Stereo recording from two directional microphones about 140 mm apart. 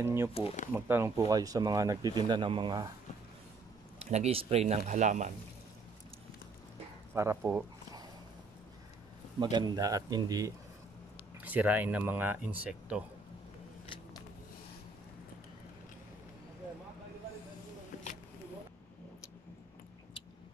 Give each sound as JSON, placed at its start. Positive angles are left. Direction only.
{"t": 0.0, "sound": "speech", "side_deg": -15}
{"t": 4.0, "sound": "speech", "side_deg": -50}
{"t": 7.2, "sound": "speech", "side_deg": -20}
{"t": 9.4, "sound": "speech", "side_deg": -30}
{"t": 11.4, "sound": "speech", "side_deg": -10}
{"t": 17.9, "sound": "a sound", "side_deg": 65}